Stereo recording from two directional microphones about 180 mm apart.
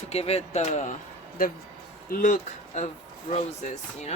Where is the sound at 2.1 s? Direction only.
50° left (ahead or behind).